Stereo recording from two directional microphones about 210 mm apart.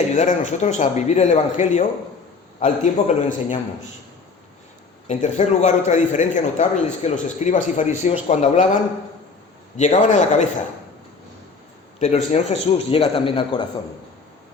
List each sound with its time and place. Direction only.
0.1 s a man's voice: 35° left (ahead or behind)
5.0 s a man's voice: 35° left (ahead or behind)
11.9 s a man's voice: 35° left (ahead or behind)